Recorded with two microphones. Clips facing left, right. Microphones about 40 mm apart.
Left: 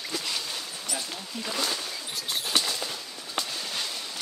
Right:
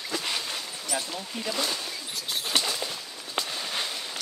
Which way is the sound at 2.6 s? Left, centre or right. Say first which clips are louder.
Right 1 dB; centre.